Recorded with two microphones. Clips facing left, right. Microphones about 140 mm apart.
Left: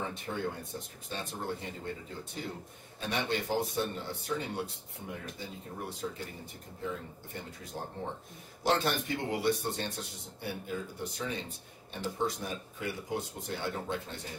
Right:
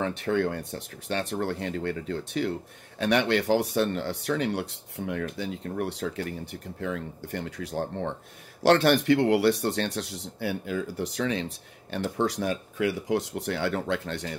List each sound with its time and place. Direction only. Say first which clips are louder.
0.0 s speech: right 9 dB; 75° right (ahead or behind)
3.0 s speech: right 10 dB; 90° right